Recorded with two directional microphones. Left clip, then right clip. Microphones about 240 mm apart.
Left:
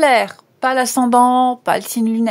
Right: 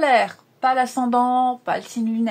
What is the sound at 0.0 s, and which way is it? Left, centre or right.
Speech, left.